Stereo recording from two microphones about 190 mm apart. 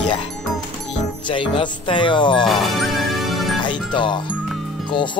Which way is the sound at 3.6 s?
25° left (ahead or behind).